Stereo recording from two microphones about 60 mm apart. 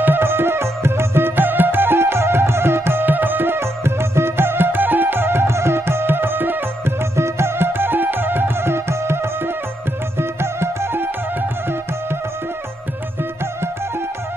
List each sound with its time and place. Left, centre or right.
0.0 s music: right
7.2 s music: right